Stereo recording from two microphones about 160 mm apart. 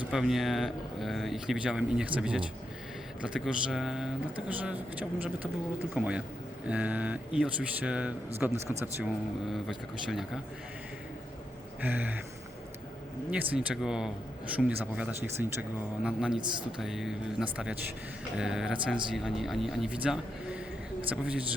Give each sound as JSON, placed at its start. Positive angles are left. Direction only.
{"t": 0.1, "sound": "speech", "side_deg": 0}
{"t": 11.8, "sound": "speech", "side_deg": -10}
{"t": 13.3, "sound": "speech", "side_deg": -10}
{"t": 16.4, "sound": "speech", "side_deg": -30}
{"t": 16.7, "sound": "speech", "side_deg": 0}